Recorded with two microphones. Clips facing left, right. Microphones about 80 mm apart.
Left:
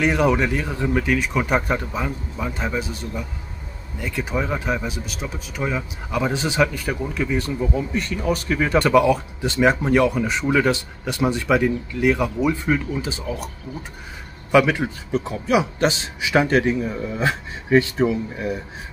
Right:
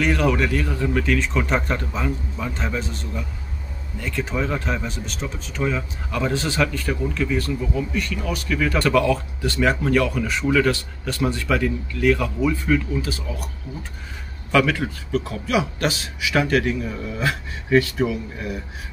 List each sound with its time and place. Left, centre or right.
0.0 s speech: centre
14.5 s speech: centre